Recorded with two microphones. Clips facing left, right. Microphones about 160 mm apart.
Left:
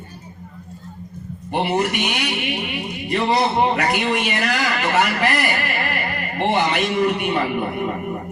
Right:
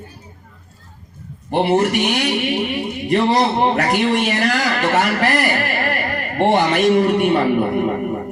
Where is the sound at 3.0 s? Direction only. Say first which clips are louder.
Right 3 dB; 45° right (ahead or behind).